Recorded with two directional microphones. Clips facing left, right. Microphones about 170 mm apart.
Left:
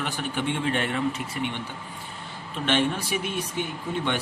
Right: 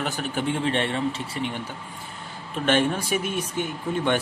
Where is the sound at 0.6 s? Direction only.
30° right (ahead or behind).